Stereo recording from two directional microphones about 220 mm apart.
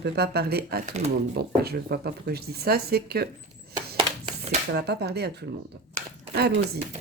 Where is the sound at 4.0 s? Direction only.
30° right (ahead or behind).